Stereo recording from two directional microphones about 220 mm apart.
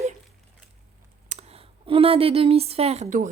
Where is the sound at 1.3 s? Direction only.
25° right (ahead or behind).